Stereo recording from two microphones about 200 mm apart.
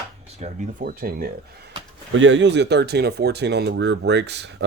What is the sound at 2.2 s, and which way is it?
Speech, 65° right (ahead or behind).